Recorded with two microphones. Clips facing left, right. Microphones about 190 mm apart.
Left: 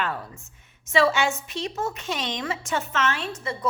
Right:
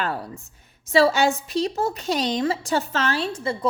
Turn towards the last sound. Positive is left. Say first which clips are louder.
# right 5 dB
turn(degrees=-30)  # may be behind; listen again after turning